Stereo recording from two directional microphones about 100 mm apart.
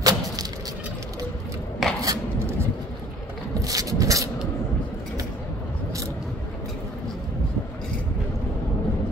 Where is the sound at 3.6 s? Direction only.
35° right (ahead or behind).